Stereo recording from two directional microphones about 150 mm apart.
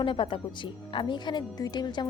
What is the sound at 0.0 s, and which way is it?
A woman's voice, 35° left (ahead or behind).